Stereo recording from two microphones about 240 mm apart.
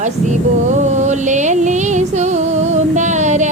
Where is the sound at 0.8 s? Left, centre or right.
Right.